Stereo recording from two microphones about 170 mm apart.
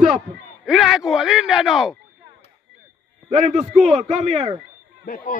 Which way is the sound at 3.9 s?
40° right (ahead or behind).